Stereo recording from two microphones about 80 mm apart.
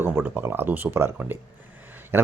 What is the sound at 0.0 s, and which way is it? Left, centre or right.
Speech, right.